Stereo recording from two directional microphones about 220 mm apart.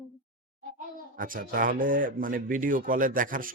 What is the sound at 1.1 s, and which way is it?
Speech, 40° right (ahead or behind).